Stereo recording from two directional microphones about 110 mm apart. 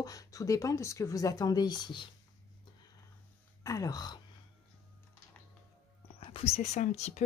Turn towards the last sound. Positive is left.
turn(degrees=90)